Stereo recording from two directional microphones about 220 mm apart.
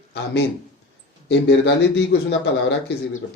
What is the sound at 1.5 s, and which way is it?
Speech, 50° left (ahead or behind).